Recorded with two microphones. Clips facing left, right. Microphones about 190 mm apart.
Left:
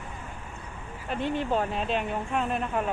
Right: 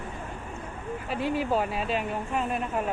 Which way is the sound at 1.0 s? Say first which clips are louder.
Even; 5° right (ahead or behind).